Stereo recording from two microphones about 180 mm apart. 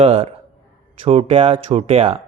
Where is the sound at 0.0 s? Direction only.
30° right (ahead or behind).